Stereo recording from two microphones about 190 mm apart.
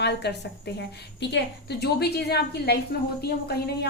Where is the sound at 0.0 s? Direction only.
60° left (ahead or behind).